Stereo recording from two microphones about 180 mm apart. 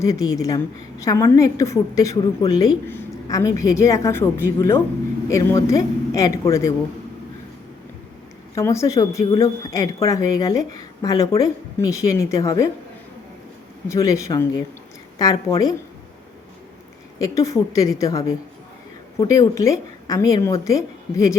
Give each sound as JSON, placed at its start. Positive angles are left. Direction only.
{"t": 0.0, "sound": "a woman's voice", "side_deg": 20}
{"t": 8.5, "sound": "speech", "side_deg": 15}
{"t": 13.8, "sound": "a woman's voice", "side_deg": 15}
{"t": 17.2, "sound": "a woman's voice", "side_deg": 20}